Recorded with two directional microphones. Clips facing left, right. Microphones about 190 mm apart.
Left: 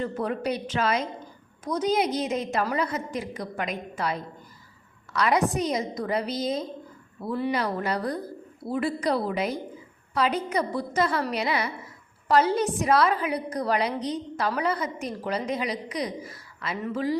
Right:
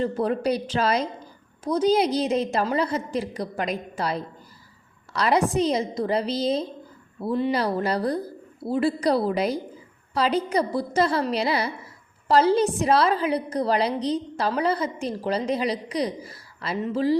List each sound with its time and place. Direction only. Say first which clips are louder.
0.0 s a woman's voice: right 4 dB; 35° right (ahead or behind)